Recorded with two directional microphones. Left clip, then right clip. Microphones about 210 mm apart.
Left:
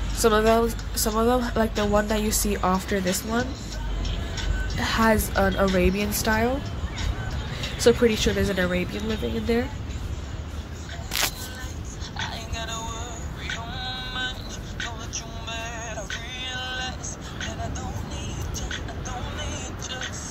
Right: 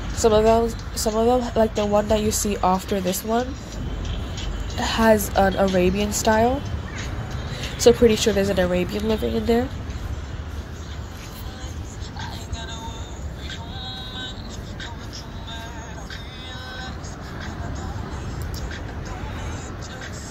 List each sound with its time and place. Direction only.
0.2 s a woman's voice: 5° right (ahead or behind)
4.7 s a woman's voice: 10° right (ahead or behind)
7.8 s a woman's voice: 10° right (ahead or behind)
13.5 s synthetic singing: 15° left (ahead or behind)